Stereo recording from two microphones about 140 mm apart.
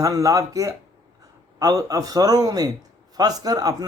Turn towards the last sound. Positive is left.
turn(degrees=-25)  # may be behind; listen again after turning